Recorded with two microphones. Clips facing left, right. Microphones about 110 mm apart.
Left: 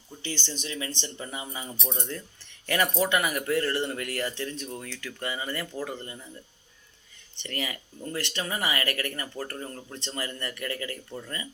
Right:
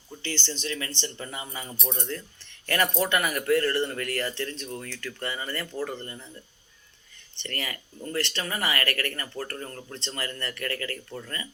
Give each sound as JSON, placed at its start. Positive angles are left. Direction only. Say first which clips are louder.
{"t": 0.2, "sound": "speech", "louder": "right 2 dB", "side_deg": 10}
{"t": 7.3, "sound": "speech", "louder": "left 1 dB", "side_deg": 20}